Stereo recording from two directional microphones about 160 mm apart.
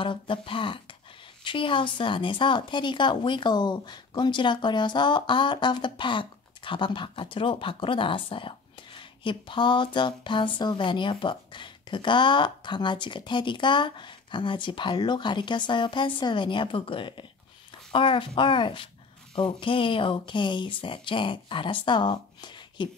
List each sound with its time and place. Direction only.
0.0 s speech: 30° left (ahead or behind)